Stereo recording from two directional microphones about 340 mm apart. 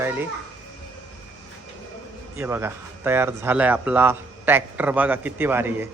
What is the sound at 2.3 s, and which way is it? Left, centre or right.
Speech, centre.